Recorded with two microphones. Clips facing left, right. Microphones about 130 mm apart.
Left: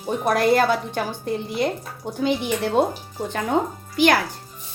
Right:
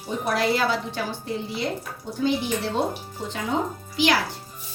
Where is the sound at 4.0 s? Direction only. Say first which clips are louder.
Left 4 dB; 50° left (ahead or behind).